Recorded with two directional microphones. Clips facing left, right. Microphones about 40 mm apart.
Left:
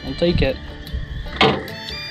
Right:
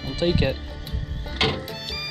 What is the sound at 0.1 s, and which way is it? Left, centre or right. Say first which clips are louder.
Speech: left 4 dB; left.